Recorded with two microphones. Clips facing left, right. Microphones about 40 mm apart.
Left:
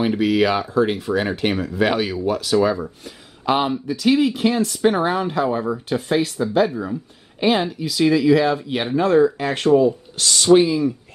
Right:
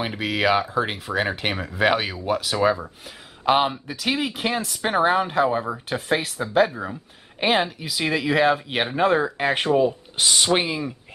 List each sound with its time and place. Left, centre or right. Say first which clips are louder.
0.0 s speech: left 5 dB; centre
6.7 s a woman's voice: left 5 dB; centre